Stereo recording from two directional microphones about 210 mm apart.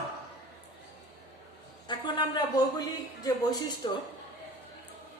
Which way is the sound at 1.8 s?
20° left (ahead or behind).